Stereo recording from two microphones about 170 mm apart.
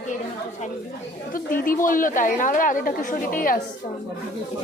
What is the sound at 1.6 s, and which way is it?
Speech, 50° left (ahead or behind).